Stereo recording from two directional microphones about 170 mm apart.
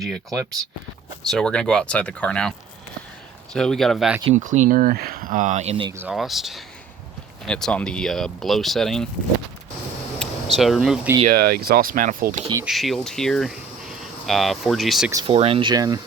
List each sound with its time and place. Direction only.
0.0 s speech: centre (ahead or behind)
4.4 s speech: 45° right (ahead or behind)
6.0 s speech: 5° right (ahead or behind)
10.2 s a sound: centre (ahead or behind)
11.3 s speech: 65° right (ahead or behind); by 12.5 s 50° right (ahead or behind)
12.6 s speech: centre (ahead or behind)
15.3 s speech: 35° right (ahead or behind)